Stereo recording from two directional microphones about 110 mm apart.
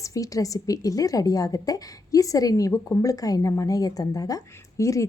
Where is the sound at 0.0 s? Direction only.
30° left (ahead or behind).